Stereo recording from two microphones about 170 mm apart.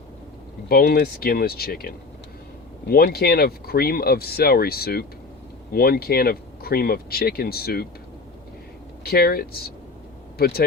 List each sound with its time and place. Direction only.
0.7 s speech: 65° left (ahead or behind)
9.0 s speech: 65° left (ahead or behind)